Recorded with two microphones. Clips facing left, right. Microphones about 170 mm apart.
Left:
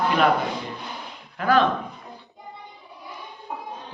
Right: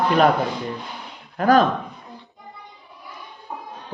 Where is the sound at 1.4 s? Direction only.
40° right (ahead or behind).